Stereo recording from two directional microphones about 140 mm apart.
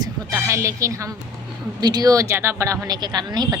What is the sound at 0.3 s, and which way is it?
Speech, 20° right (ahead or behind).